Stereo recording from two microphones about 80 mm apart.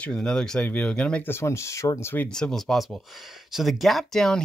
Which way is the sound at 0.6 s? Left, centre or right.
Left.